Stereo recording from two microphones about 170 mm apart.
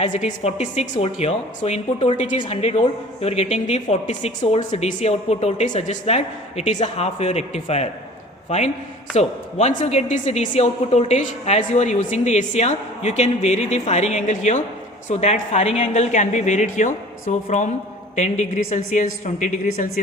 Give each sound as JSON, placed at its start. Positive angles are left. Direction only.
{"t": 0.1, "sound": "a woman's voice", "side_deg": 45}